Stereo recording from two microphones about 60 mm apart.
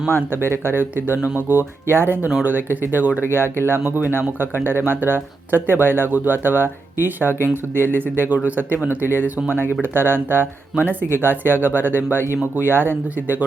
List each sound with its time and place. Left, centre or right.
0.1 s speech: right